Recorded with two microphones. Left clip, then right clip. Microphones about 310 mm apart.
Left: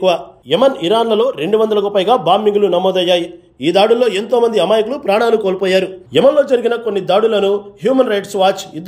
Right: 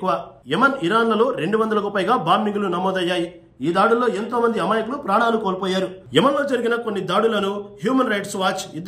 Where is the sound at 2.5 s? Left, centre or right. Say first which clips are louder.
Left 10 dB; left.